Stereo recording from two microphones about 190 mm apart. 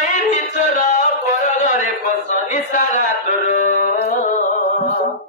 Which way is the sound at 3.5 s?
45° left (ahead or behind).